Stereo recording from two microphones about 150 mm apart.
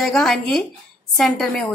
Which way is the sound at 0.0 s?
Centre (ahead or behind).